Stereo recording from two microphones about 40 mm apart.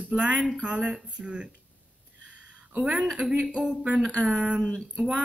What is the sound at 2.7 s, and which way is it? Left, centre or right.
Speech, right.